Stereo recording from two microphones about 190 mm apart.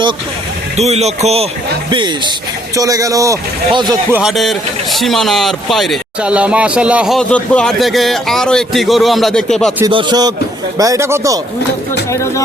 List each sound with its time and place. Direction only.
0.8 s speech: 35° right (ahead or behind)
4.1 s speech: centre (ahead or behind)
9.9 s speech: 25° right (ahead or behind)
12.1 s speech: 15° left (ahead or behind)